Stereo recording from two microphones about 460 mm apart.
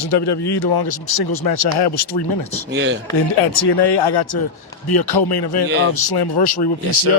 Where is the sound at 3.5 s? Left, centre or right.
Left.